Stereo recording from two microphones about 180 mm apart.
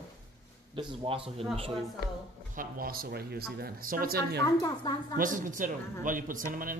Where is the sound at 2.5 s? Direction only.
50° right (ahead or behind).